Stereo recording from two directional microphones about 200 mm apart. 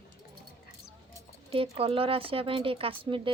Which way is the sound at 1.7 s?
30° right (ahead or behind).